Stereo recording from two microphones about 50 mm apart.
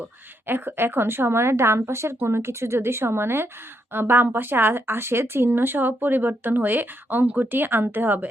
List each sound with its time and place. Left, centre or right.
0.4 s a woman's voice: right